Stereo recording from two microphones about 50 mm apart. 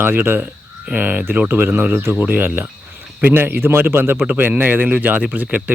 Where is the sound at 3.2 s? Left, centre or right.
Right.